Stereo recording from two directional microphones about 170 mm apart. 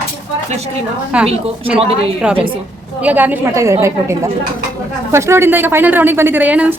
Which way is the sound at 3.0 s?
10° right (ahead or behind).